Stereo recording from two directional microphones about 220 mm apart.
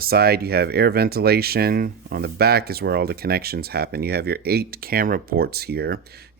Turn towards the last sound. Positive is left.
turn(degrees=-45)  # may be behind; listen again after turning